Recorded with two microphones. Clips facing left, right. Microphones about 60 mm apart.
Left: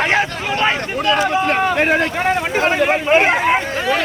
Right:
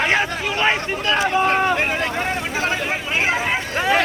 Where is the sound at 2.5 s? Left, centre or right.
Left.